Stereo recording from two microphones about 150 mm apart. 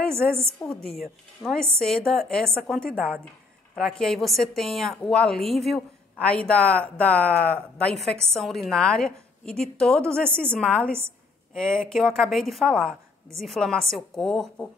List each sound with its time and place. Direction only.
0.6 s a woman's voice: centre (ahead or behind)